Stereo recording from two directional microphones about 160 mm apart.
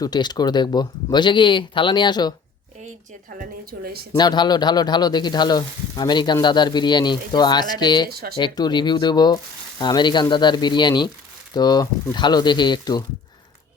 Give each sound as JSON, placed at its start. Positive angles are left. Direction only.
{"t": 0.0, "sound": "speech", "side_deg": 25}
{"t": 2.8, "sound": "a woman's voice", "side_deg": -55}
{"t": 4.1, "sound": "speech", "side_deg": 25}
{"t": 8.1, "sound": "speech", "side_deg": -75}
{"t": 8.4, "sound": "speech", "side_deg": 25}